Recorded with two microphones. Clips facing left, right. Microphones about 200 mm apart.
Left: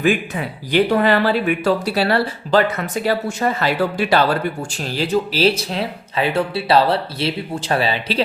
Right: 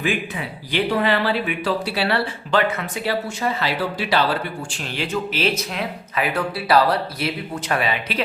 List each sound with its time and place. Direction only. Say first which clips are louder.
0.0 s speech: left 6 dB; 45° left (ahead or behind)